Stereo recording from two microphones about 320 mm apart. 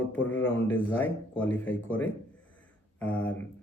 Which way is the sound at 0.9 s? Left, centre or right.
Centre.